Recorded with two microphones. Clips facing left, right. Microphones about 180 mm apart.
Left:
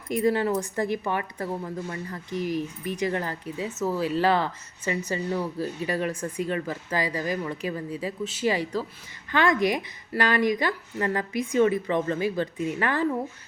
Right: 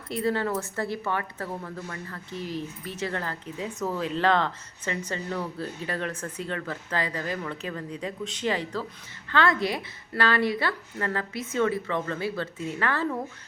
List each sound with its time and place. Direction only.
0.1 s speech: 15° left (ahead or behind)
3.6 s speech: 5° left (ahead or behind)